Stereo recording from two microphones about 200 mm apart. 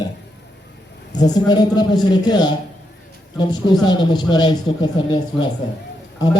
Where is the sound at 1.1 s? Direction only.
20° left (ahead or behind).